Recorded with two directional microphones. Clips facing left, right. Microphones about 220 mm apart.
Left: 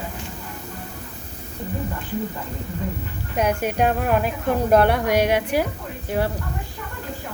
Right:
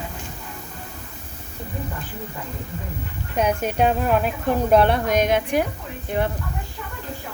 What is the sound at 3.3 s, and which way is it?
Speech, 10° left (ahead or behind).